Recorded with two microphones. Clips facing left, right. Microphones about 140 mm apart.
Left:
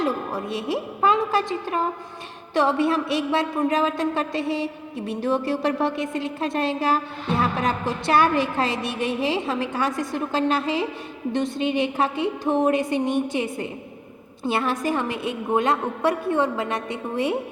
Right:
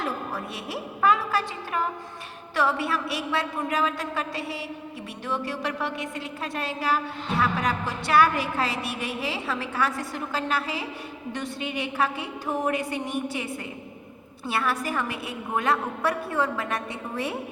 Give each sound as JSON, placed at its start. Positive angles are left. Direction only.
{"t": 0.0, "sound": "a woman's voice", "side_deg": 20}